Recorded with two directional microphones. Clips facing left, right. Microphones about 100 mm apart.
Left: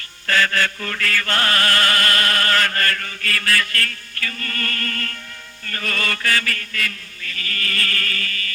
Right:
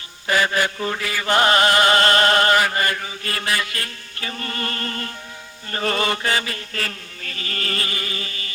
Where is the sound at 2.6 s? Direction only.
15° right (ahead or behind).